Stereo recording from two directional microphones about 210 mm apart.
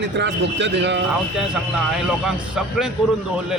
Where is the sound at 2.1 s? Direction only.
5° right (ahead or behind).